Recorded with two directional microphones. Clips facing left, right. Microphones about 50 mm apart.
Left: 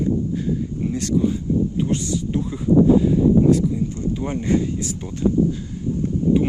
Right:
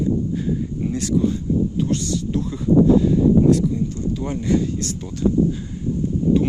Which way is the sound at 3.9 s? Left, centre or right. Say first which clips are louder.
Even; left.